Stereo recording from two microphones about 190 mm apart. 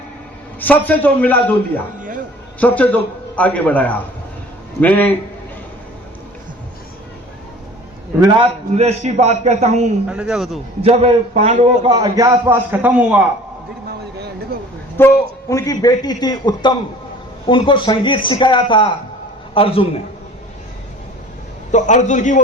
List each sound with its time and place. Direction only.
0.6 s a man's voice: 10° left (ahead or behind)
8.2 s a man's voice: 20° right (ahead or behind)
8.7 s a man's voice: 35° right (ahead or behind)
10.1 s a man's voice: 5° right (ahead or behind)
10.8 s a man's voice: 30° right (ahead or behind); by 13.2 s 5° right (ahead or behind)
14.2 s a sound: 60° right (ahead or behind)
14.9 s a man's voice: 15° left (ahead or behind)
21.7 s a man's voice: 40° left (ahead or behind)